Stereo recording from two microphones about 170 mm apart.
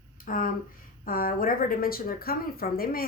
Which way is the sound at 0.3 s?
55° left (ahead or behind).